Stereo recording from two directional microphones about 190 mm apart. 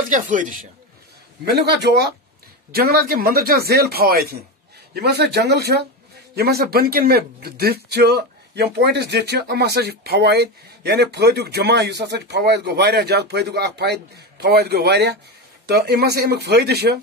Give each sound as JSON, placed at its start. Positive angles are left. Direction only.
{"t": 0.1, "sound": "a man's voice", "side_deg": -45}
{"t": 1.4, "sound": "a man's voice", "side_deg": -60}